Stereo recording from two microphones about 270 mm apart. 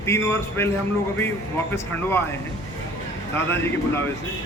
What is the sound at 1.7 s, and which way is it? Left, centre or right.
Speech, centre.